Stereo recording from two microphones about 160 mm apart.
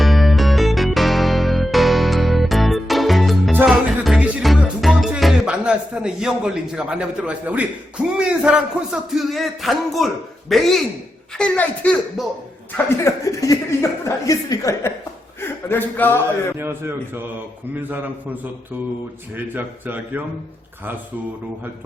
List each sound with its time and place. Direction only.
0.0 s music: centre (ahead or behind)
10.5 s a child's voice: centre (ahead or behind)
12.2 s speech: centre (ahead or behind)
12.7 s speech: 20° left (ahead or behind)
16.6 s a man's voice: 15° right (ahead or behind)
19.5 s a man's voice: 10° right (ahead or behind)